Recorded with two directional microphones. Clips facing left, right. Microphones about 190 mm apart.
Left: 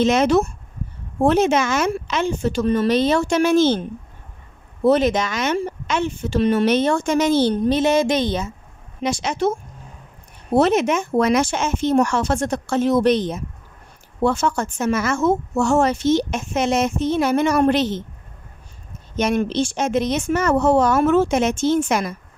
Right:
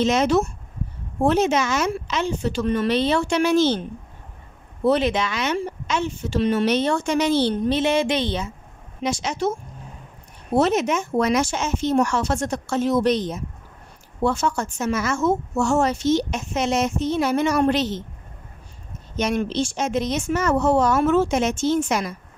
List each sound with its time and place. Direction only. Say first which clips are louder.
0.0 s speech: left 3 dB; 55° left (ahead or behind)
4.8 s speech: left 3 dB; 45° left (ahead or behind)
9.0 s speech: left 3 dB; 60° left (ahead or behind)
10.6 s speech: left 3 dB; 60° left (ahead or behind)
19.1 s speech: left 3 dB; 55° left (ahead or behind)